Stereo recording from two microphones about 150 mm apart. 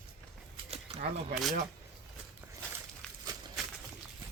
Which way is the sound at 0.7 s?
45° right (ahead or behind).